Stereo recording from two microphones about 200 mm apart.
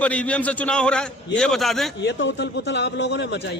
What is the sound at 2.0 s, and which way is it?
A man's voice, 60° left (ahead or behind).